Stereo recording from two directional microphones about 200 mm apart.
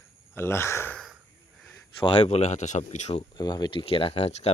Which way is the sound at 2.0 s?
25° left (ahead or behind).